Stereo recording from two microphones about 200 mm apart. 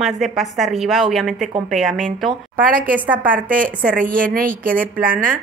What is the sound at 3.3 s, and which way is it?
A woman's voice, 45° right (ahead or behind).